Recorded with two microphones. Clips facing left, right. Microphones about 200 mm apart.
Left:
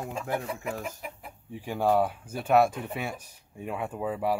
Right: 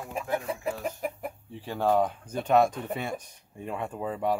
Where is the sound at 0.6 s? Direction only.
40° right (ahead or behind).